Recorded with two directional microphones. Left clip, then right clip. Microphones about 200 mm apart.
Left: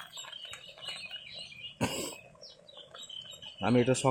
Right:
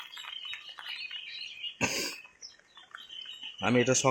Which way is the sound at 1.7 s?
15° left (ahead or behind).